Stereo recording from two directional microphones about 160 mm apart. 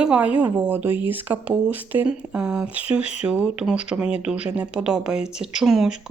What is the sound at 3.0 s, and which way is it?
Speech, 40° left (ahead or behind).